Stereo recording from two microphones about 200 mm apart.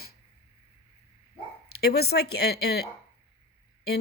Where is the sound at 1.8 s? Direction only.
50° left (ahead or behind).